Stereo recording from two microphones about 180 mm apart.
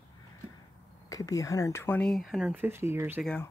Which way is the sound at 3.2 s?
5° left (ahead or behind).